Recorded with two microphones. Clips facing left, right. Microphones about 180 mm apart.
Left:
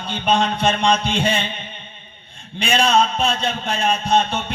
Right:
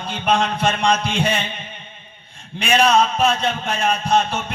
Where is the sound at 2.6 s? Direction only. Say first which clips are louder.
Right 1 dB; 30° left (ahead or behind).